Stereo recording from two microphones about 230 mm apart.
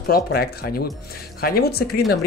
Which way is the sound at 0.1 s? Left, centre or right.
Left.